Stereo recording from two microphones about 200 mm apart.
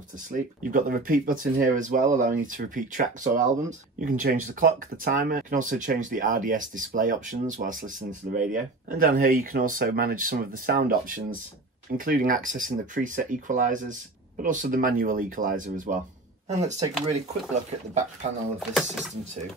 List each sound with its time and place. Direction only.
0.3 s speech: 45° right (ahead or behind)
18.6 s speech: centre (ahead or behind)